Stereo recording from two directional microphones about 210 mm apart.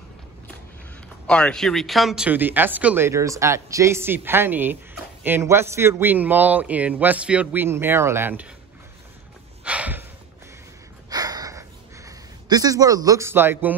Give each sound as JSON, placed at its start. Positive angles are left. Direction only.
{"t": 1.2, "sound": "speech", "side_deg": 5}
{"t": 9.7, "sound": "a sound", "side_deg": -5}
{"t": 11.1, "sound": "gasp", "side_deg": -20}